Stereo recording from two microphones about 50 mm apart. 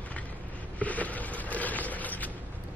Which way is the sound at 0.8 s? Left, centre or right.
Left.